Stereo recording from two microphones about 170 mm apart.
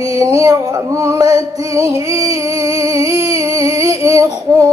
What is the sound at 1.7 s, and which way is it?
Music, 20° right (ahead or behind).